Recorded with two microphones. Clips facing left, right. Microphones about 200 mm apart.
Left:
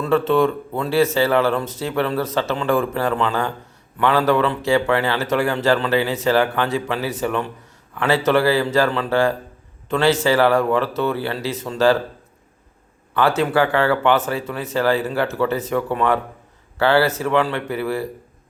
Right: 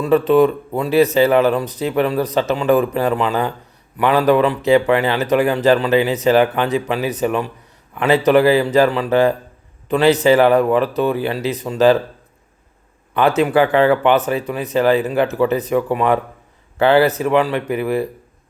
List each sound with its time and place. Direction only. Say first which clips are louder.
0.0 s speech: right 4 dB; 15° right (ahead or behind)
13.1 s speech: right 3 dB; 20° right (ahead or behind)